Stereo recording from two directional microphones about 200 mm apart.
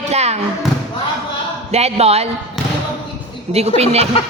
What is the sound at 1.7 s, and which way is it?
Speech, 30° right (ahead or behind).